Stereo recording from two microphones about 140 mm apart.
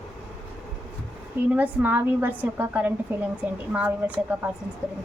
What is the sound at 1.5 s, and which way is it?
A woman's voice, 10° right (ahead or behind).